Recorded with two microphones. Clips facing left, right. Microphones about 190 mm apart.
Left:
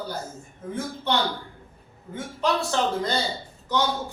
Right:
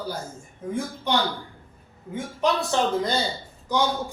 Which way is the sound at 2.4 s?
15° right (ahead or behind).